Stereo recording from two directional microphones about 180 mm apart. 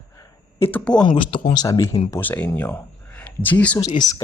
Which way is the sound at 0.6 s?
10° left (ahead or behind).